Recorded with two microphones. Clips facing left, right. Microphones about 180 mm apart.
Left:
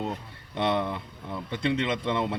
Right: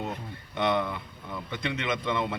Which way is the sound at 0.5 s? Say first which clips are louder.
Left 1 dB; 30° left (ahead or behind).